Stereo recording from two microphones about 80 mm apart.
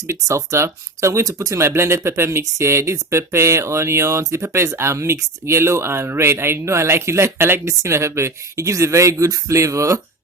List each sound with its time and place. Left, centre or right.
0.1 s speech: right